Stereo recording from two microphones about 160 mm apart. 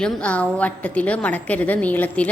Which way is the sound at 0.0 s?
10° left (ahead or behind).